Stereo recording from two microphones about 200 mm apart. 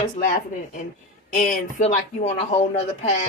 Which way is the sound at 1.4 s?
35° left (ahead or behind).